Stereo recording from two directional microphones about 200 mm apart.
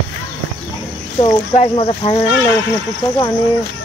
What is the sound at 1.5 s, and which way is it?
Speech, 30° left (ahead or behind).